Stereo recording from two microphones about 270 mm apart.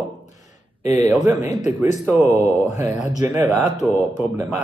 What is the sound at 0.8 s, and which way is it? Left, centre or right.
A man's voice, centre.